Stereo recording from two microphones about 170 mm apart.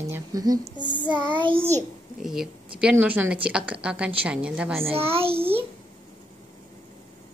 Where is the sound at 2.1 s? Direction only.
Centre (ahead or behind).